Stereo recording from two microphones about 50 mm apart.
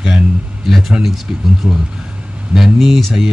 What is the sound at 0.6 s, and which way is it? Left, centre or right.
A man's voice, centre.